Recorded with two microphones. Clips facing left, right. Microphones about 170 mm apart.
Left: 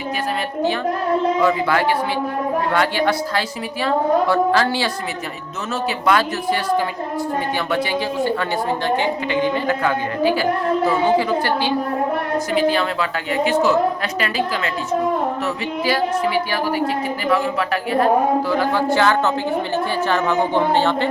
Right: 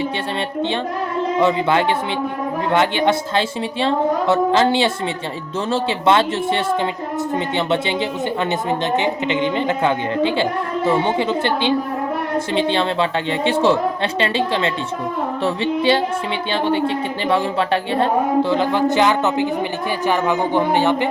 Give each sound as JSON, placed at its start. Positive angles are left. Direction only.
{"t": 1.4, "sound": "speech", "side_deg": -25}
{"t": 7.7, "sound": "speech", "side_deg": -25}